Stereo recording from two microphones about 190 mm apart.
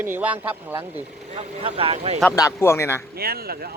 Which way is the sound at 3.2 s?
55° right (ahead or behind).